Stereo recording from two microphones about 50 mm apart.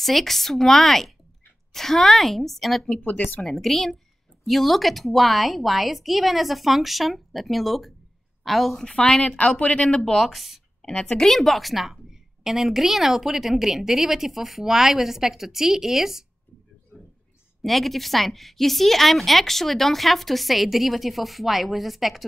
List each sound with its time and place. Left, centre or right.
0.0 s a woman's voice: centre
2.9 s speech: left
3.4 s a woman's voice: centre
8.8 s speech: centre
10.0 s a woman's voice: centre
10.9 s speech: left
11.1 s a woman's voice: centre
16.9 s a sound: centre
17.6 s a woman's voice: centre